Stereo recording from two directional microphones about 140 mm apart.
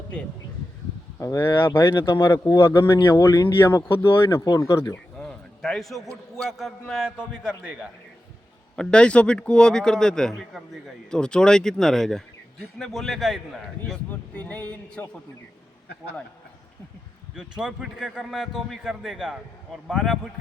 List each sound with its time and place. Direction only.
1.2 s speech: 20° left (ahead or behind)
5.1 s a sound: 5° left (ahead or behind)
6.3 s a man's voice: centre (ahead or behind)
8.7 s a man's voice: 5° left (ahead or behind)
17.6 s a man's voice: 5° right (ahead or behind)